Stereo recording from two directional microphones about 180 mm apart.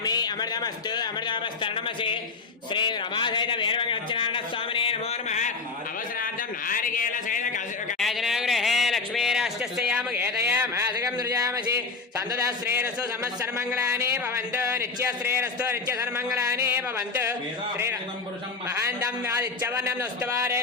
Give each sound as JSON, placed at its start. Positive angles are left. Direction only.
{"t": 0.0, "sound": "a man's voice", "side_deg": 20}
{"t": 4.7, "sound": "a sound", "side_deg": 30}
{"t": 6.7, "sound": "a man's voice", "side_deg": 50}
{"t": 7.9, "sound": "a man's voice", "side_deg": 0}
{"t": 13.8, "sound": "a man's voice", "side_deg": -15}
{"t": 19.8, "sound": "a man's voice", "side_deg": -15}